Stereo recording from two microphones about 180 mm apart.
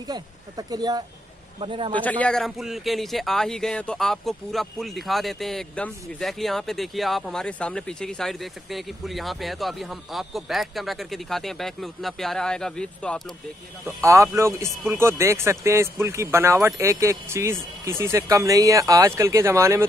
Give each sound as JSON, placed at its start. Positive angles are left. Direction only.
{"t": 0.1, "sound": "speech", "side_deg": -20}
{"t": 2.0, "sound": "a man's voice", "side_deg": 10}
{"t": 13.8, "sound": "speech", "side_deg": -15}